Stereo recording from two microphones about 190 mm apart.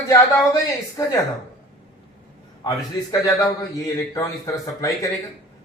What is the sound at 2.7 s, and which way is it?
A woman's voice, 15° left (ahead or behind).